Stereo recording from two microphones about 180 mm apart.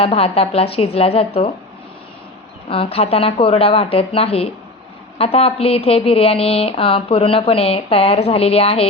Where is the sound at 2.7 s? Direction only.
30° left (ahead or behind).